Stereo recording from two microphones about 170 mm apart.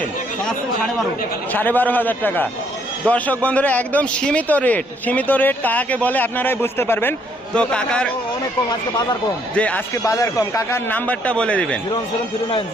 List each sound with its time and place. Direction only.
1.5 s a man's voice: 10° left (ahead or behind)
9.6 s a man's voice: 10° left (ahead or behind)
10.0 s a man's voice: 20° left (ahead or behind)